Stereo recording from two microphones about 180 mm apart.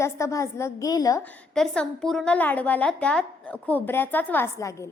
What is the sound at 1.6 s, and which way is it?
A woman's voice, 5° left (ahead or behind).